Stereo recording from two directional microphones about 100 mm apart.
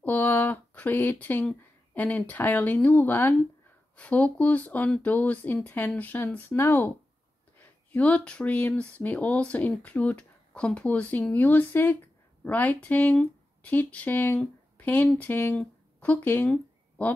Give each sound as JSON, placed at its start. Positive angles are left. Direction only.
{"t": 0.0, "sound": "speech", "side_deg": 15}